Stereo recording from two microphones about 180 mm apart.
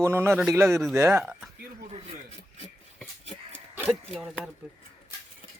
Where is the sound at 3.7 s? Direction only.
10° right (ahead or behind).